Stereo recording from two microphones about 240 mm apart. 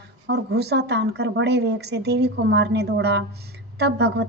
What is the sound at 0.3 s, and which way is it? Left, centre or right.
Speech, right.